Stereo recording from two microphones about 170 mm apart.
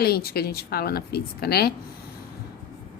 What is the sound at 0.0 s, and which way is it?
A woman's voice, 65° left (ahead or behind).